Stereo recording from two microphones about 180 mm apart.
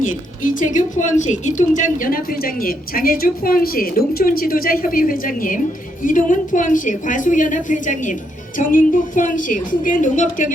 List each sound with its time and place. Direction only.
0.0 s a woman's voice: 45° left (ahead or behind)